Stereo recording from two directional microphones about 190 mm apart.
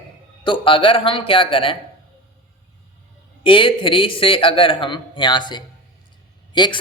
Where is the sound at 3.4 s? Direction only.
25° left (ahead or behind).